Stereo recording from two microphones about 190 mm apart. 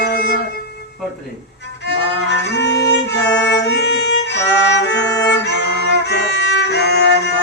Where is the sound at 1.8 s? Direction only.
65° left (ahead or behind).